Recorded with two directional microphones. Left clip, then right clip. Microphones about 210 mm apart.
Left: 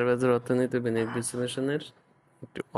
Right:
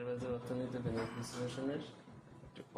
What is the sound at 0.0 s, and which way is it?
Speech, 55° left (ahead or behind).